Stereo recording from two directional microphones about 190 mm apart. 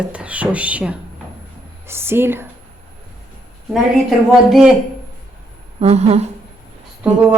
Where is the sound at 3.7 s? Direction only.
Centre (ahead or behind).